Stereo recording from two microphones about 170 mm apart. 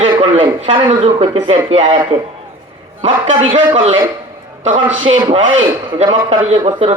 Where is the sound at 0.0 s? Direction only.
30° right (ahead or behind).